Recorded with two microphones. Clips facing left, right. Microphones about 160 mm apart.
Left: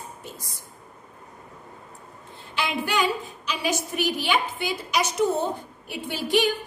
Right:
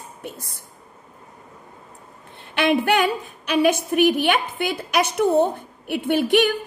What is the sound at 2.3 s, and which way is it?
A woman's voice, 65° right (ahead or behind).